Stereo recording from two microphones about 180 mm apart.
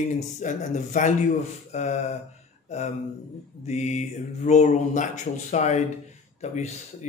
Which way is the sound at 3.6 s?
40° left (ahead or behind).